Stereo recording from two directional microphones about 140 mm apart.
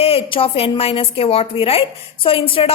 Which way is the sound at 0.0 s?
40° left (ahead or behind).